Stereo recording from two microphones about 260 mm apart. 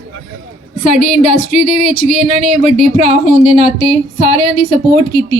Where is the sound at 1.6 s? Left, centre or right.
Right.